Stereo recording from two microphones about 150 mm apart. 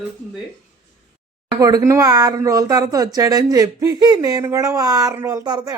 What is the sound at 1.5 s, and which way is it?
A woman's voice, 25° right (ahead or behind).